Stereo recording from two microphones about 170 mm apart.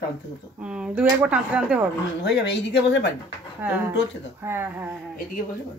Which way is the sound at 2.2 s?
90° left.